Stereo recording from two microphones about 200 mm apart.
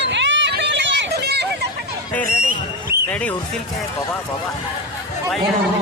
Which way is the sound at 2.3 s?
45° right (ahead or behind).